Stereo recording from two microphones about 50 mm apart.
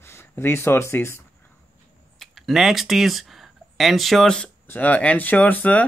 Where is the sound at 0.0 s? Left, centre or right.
Left.